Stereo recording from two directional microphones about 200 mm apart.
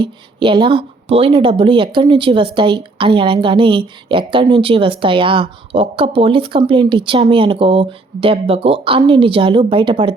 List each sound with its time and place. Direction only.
0.0 s speech: 25° right (ahead or behind)